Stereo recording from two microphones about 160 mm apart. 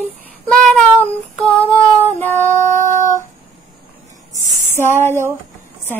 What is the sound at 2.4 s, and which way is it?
Music, 50° right (ahead or behind).